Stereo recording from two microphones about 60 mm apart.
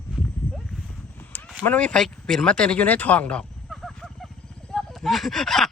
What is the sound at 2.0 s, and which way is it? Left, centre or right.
Speech, centre.